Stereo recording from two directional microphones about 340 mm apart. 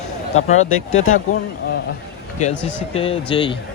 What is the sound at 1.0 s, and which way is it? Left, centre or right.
Speech, left.